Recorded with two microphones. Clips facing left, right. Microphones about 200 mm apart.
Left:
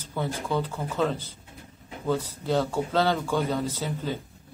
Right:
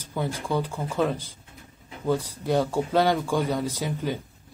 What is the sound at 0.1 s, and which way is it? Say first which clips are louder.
Speech: right 1 dB; 10° right (ahead or behind).